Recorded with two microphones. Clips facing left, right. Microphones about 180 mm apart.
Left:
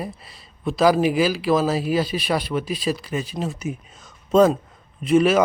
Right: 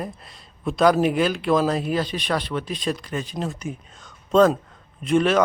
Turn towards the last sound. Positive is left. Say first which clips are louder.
# left 2 dB
turn(degrees=5)  # may be behind; listen again after turning